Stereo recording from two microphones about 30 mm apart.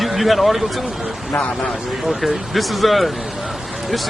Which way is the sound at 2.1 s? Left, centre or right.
Centre.